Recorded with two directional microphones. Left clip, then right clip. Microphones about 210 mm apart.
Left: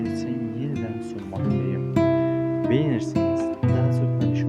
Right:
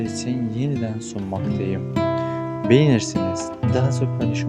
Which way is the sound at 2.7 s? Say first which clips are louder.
Right 10 dB; 40° right (ahead or behind).